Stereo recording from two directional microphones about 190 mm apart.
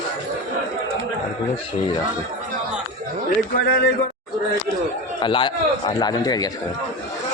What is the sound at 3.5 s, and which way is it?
Speech, 50° left (ahead or behind).